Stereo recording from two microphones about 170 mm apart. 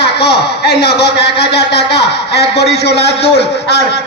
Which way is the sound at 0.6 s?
70° left (ahead or behind).